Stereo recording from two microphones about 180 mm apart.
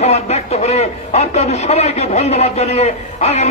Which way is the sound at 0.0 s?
35° left (ahead or behind).